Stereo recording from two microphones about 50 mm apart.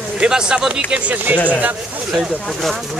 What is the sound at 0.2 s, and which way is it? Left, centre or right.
Speech, centre.